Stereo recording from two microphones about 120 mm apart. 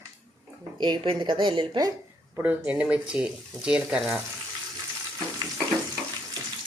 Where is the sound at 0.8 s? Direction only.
45° right (ahead or behind).